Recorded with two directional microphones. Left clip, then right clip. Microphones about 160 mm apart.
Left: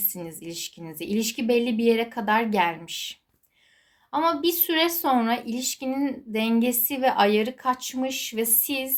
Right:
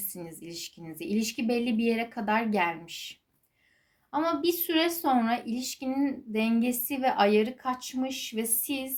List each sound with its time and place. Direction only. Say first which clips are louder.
0.1 s speech: left 5 dB; 15° left (ahead or behind)